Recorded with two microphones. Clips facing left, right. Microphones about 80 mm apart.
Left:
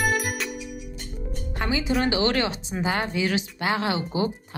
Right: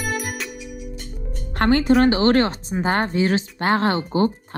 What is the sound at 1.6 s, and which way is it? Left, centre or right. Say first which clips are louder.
Speech: right 9 dB; right.